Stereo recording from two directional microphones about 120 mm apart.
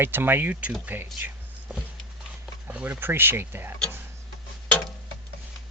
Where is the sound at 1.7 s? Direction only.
10° right (ahead or behind).